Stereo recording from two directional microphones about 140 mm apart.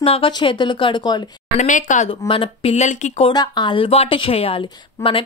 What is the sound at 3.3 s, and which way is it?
Speech, 30° left (ahead or behind).